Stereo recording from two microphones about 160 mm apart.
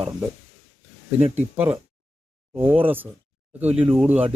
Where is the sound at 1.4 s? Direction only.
10° right (ahead or behind).